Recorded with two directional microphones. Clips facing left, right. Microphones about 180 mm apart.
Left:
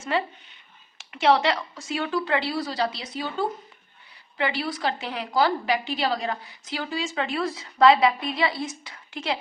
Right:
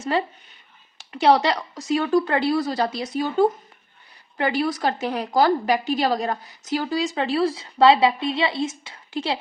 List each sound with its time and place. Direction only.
0.1 s a woman's voice: 35° right (ahead or behind)